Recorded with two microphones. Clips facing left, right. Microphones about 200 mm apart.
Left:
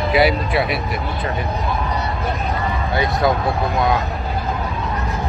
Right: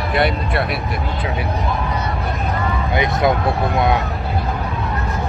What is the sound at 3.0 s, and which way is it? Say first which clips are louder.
Speech: right 1 dB; 20° right (ahead or behind).